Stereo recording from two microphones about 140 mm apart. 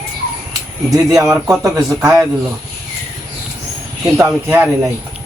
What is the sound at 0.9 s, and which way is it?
Speech, 25° right (ahead or behind).